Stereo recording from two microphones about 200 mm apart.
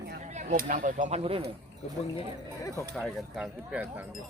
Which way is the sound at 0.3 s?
40° right (ahead or behind).